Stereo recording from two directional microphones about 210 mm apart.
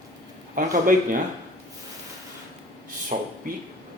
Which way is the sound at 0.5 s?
40° right (ahead or behind).